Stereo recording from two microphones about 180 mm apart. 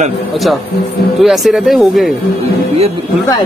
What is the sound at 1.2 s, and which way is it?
Speech, centre (ahead or behind).